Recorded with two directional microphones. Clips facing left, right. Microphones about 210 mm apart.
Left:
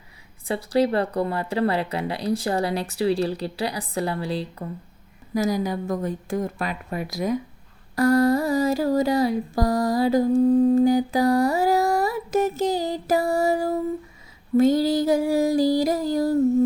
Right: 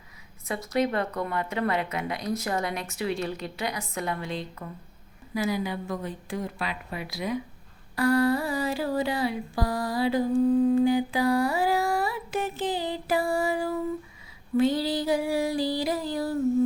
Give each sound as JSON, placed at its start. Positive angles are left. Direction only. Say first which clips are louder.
{"t": 0.4, "sound": "humming", "louder": "left 5 dB", "side_deg": 30}
{"t": 5.3, "sound": "a woman's voice", "louder": "left 5 dB", "side_deg": 40}
{"t": 7.9, "sound": "humming", "louder": "left 4 dB", "side_deg": 45}
{"t": 14.5, "sound": "a woman's voice", "louder": "left 6 dB", "side_deg": 45}